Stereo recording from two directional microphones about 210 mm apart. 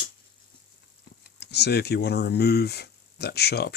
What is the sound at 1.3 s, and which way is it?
Speech, 50° left (ahead or behind).